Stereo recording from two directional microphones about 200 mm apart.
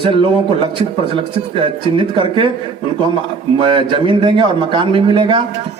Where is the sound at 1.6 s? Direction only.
25° right (ahead or behind).